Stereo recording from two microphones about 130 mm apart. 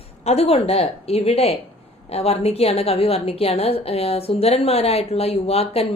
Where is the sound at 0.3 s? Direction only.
50° left (ahead or behind).